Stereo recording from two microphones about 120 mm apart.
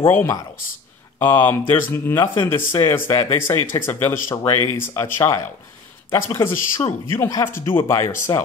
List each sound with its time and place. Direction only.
0.0 s speech: 20° left (ahead or behind)
8.3 s speech: 35° left (ahead or behind)